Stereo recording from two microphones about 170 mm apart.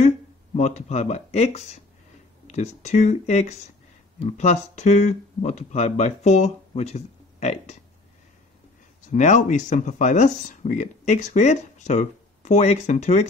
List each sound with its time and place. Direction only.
0.6 s speech: 40° left (ahead or behind)
9.0 s speech: 45° left (ahead or behind)